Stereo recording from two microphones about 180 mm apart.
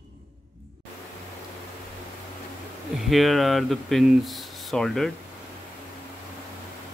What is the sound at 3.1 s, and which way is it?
Speech, centre (ahead or behind).